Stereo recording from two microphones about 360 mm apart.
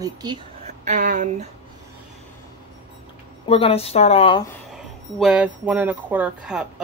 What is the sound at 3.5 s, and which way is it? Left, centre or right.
Speech, centre.